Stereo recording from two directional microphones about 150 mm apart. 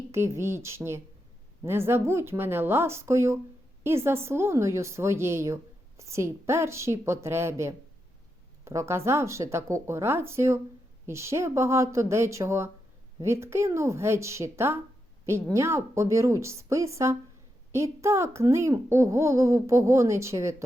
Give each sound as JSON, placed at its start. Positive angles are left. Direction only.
{"t": 0.1, "sound": "a woman's voice", "side_deg": -15}